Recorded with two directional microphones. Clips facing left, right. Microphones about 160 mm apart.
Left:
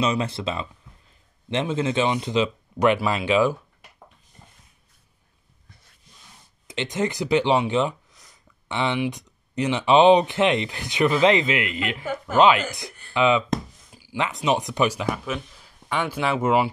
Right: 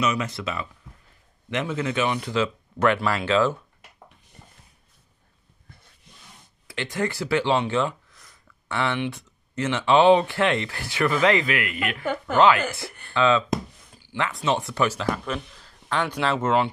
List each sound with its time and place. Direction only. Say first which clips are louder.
0.0 s speech: left 2 dB; 30° left (ahead or behind); by 3.5 s 15° left (ahead or behind)
6.7 s speech: left 2 dB; 20° left (ahead or behind)